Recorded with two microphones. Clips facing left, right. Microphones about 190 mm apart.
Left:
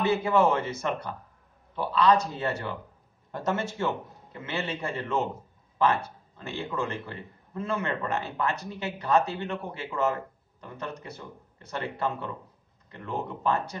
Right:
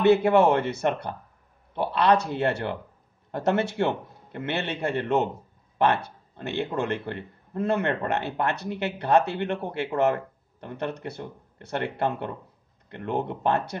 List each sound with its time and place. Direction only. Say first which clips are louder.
0.0 s a man's voice: right 5 dB; 65° right (ahead or behind)
10.6 s a man's voice: right 6 dB; 65° right (ahead or behind)